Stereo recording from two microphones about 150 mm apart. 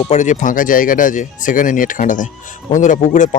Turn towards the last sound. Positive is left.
turn(degrees=60)  # may be behind; listen again after turning